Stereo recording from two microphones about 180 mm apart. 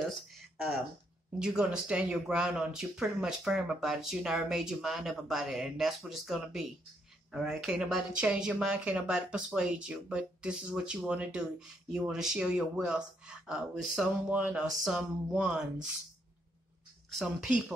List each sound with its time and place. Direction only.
0.1 s a sound: centre (ahead or behind)
1.4 s speech: 5° right (ahead or behind)
17.1 s speech: centre (ahead or behind)